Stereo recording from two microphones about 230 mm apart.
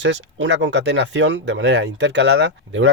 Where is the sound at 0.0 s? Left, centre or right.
Right.